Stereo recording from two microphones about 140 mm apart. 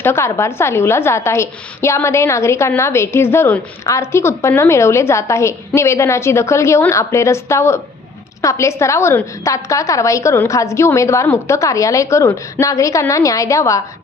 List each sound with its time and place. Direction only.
0.0 s a woman's voice: 20° left (ahead or behind)